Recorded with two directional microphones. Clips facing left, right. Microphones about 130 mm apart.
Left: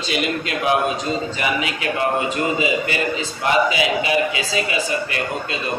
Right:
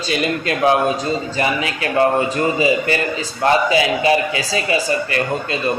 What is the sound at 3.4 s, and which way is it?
A man's voice, 35° right (ahead or behind).